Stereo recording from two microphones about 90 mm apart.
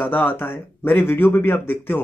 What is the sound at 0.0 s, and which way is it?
Speech, 20° left (ahead or behind).